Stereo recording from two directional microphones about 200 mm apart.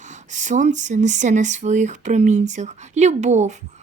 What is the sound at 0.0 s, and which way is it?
Speech, 35° right (ahead or behind).